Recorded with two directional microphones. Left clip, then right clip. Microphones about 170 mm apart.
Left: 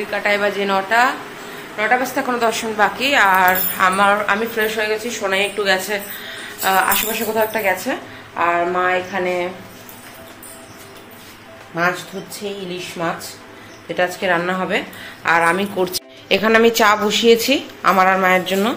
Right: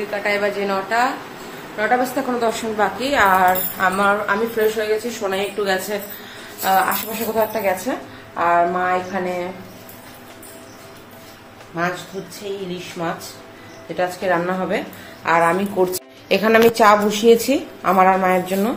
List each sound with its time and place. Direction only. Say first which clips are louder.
0.1 s a woman's voice: left 3 dB; 20° left (ahead or behind)
1.8 s a woman's voice: left 1 dB; 15° right (ahead or behind)
12.4 s a woman's voice: left 2 dB; 25° left (ahead or behind)
14.2 s a woman's voice: left 1 dB; centre (ahead or behind)